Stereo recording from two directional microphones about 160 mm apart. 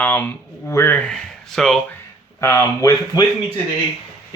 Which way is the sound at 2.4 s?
20° left (ahead or behind).